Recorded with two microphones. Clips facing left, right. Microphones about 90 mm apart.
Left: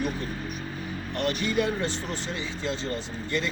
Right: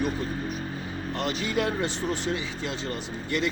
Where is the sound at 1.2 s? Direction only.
15° right (ahead or behind).